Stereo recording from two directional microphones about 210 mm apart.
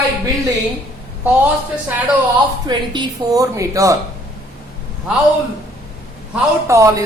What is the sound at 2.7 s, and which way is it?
A woman's voice, 20° right (ahead or behind).